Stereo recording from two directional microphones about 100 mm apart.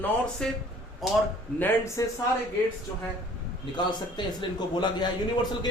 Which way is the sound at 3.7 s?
50° left (ahead or behind).